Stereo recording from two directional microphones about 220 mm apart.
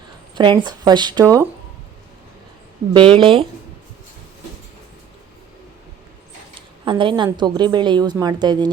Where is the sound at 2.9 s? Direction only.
25° right (ahead or behind).